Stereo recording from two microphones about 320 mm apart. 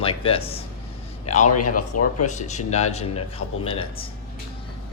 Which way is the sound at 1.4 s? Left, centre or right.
Left.